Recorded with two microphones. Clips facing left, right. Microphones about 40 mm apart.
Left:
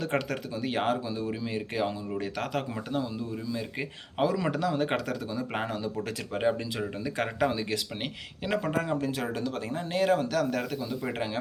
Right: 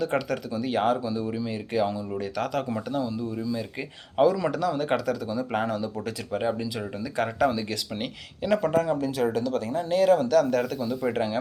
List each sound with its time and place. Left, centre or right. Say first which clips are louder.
0.1 s a man's voice: right 3 dB; left
4.4 s a man's voice: right 2 dB; left
9.0 s a man's voice: right 5 dB; left; by 11.1 s centre
11.1 s a man's voice: right 5 dB; centre